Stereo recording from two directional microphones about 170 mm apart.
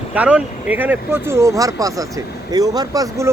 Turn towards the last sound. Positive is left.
turn(degrees=-20)  # may be behind; listen again after turning